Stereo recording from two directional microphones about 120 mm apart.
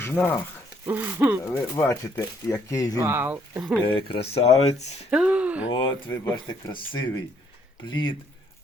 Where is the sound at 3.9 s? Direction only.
45° left (ahead or behind); by 4.8 s 65° left (ahead or behind).